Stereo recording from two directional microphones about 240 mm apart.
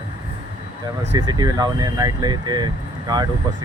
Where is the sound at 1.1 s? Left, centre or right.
Centre.